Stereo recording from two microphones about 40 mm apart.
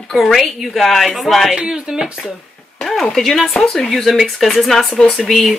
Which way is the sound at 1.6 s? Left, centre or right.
Centre.